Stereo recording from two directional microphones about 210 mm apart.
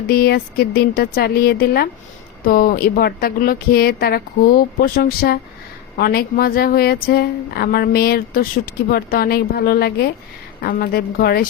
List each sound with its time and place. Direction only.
0.1 s speech: 45° left (ahead or behind)